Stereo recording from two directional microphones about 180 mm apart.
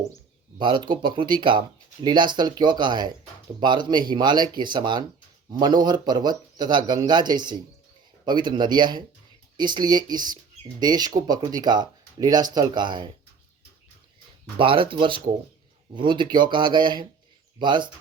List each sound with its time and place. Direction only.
0.6 s speech: 25° right (ahead or behind)
14.6 s speech: 30° right (ahead or behind)